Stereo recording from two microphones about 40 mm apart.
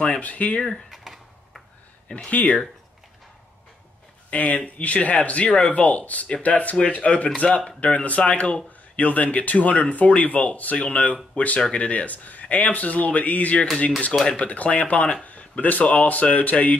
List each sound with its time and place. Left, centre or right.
0.2 s speech: left
0.8 s typing: centre
2.1 s speech: left
4.3 s speech: left
15.2 s a sound: left
15.8 s speech: left